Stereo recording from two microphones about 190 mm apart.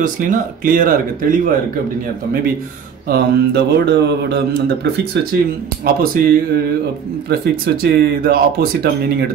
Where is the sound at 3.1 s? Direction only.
60° right (ahead or behind).